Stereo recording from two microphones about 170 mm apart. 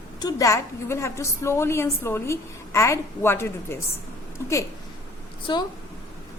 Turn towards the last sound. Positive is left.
turn(degrees=30)  # may be behind; listen again after turning